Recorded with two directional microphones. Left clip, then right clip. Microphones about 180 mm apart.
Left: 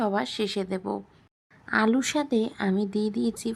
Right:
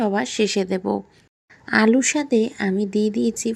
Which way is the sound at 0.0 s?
10° right (ahead or behind).